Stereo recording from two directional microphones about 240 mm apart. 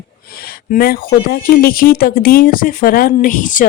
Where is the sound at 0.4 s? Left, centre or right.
Left.